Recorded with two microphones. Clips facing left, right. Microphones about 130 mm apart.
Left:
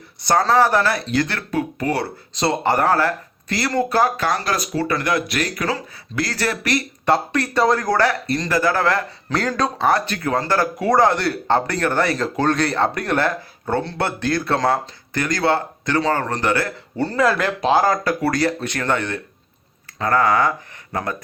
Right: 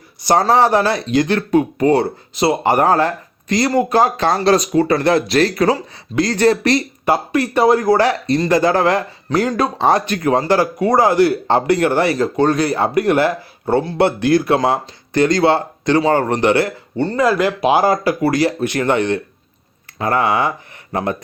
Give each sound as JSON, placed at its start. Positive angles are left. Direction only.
{"t": 0.3, "sound": "speech", "side_deg": -20}
{"t": 2.3, "sound": "speech", "side_deg": -10}
{"t": 5.7, "sound": "speech", "side_deg": -20}
{"t": 7.0, "sound": "speech", "side_deg": -10}
{"t": 10.8, "sound": "speech", "side_deg": 0}
{"t": 12.1, "sound": "speech", "side_deg": -5}
{"t": 14.0, "sound": "speech", "side_deg": -15}
{"t": 17.0, "sound": "speech", "side_deg": 0}